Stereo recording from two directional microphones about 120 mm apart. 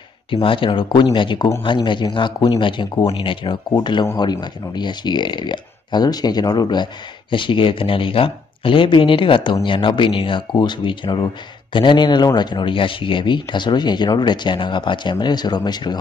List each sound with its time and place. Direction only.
0.3 s speech: 45° left (ahead or behind)